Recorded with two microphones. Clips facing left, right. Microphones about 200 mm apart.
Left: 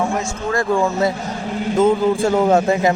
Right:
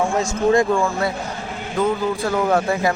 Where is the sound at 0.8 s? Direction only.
20° left (ahead or behind).